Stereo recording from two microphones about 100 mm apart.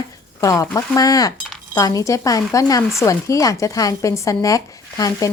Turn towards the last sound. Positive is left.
turn(degrees=35)  # may be behind; listen again after turning